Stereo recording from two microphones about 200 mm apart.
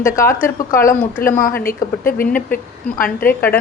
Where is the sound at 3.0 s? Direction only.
10° left (ahead or behind).